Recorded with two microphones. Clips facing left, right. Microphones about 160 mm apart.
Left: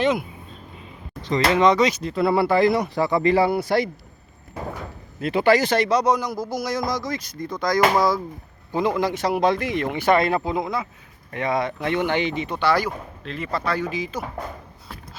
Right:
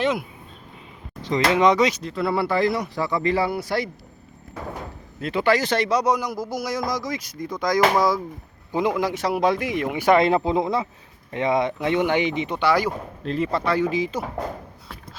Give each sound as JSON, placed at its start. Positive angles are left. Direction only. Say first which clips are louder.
{"t": 0.0, "sound": "speech", "louder": "left 2 dB", "side_deg": 0}
{"t": 1.2, "sound": "speech", "louder": "even", "side_deg": -10}
{"t": 1.9, "sound": "speech", "louder": "left 3 dB", "side_deg": 10}
{"t": 2.7, "sound": "speech", "louder": "left 4 dB", "side_deg": 60}
{"t": 5.2, "sound": "speech", "louder": "left 3 dB", "side_deg": 10}
{"t": 5.8, "sound": "speech", "louder": "left 1 dB", "side_deg": -10}
{"t": 7.8, "sound": "speech", "louder": "even", "side_deg": 5}
{"t": 8.7, "sound": "speech", "louder": "even", "side_deg": -15}
{"t": 13.2, "sound": "speech", "louder": "right 8 dB", "side_deg": -35}
{"t": 13.5, "sound": "speech", "louder": "right 1 dB", "side_deg": -20}